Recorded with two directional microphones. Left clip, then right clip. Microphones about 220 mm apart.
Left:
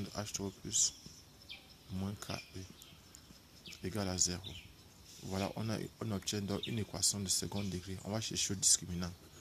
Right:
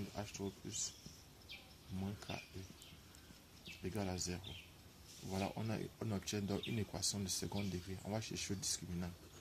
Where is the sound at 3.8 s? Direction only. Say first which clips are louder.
Left 7 dB; 20° left (ahead or behind).